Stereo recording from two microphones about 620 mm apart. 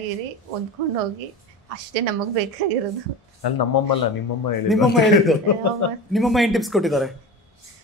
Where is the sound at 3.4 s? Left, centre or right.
Left.